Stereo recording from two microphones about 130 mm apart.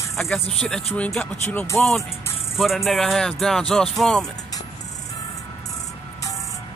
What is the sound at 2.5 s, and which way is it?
Music, centre (ahead or behind).